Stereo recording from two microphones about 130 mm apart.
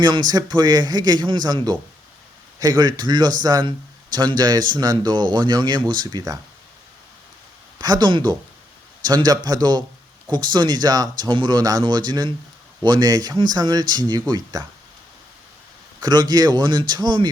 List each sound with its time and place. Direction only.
0.0 s a man's voice: 30° right (ahead or behind)
7.8 s a man's voice: 30° right (ahead or behind)
16.0 s a man's voice: 30° right (ahead or behind)